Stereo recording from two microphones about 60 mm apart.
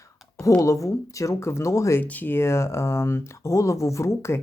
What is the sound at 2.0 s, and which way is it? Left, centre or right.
Speech, left.